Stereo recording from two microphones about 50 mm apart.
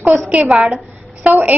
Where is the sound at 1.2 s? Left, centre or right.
Right.